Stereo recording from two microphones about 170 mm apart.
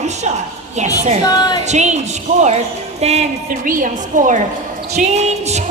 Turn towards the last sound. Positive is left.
turn(degrees=-40)  # may be behind; listen again after turning